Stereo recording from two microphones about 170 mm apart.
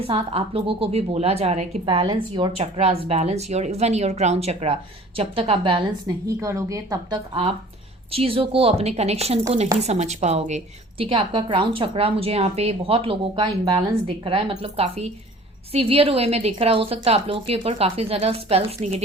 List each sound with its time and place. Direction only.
0.1 s a woman's voice: 35° right (ahead or behind)
6.2 s speech: 15° right (ahead or behind)
8.1 s a woman's voice: 35° right (ahead or behind)